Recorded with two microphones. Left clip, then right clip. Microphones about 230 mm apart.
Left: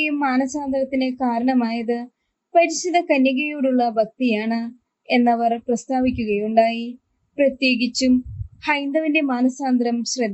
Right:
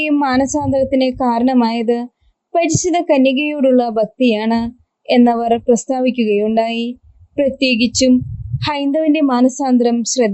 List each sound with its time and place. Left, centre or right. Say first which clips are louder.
0.0 s a woman's voice: right 6 dB; right